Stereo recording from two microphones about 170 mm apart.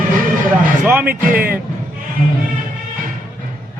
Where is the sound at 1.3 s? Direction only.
55° right (ahead or behind).